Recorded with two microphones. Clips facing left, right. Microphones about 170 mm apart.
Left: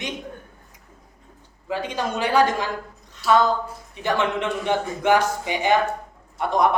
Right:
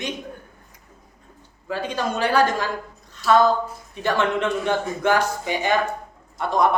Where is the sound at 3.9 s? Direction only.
15° left (ahead or behind).